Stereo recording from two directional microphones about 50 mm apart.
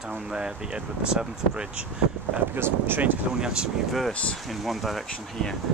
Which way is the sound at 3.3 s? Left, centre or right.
Centre.